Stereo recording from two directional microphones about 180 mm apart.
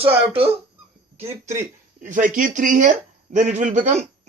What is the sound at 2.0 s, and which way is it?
Speech, 45° right (ahead or behind).